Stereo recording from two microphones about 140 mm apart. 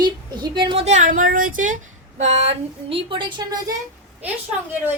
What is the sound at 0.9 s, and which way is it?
Speech, 65° right (ahead or behind).